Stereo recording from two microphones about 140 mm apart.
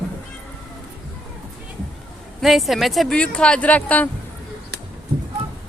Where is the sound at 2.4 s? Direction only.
Centre (ahead or behind).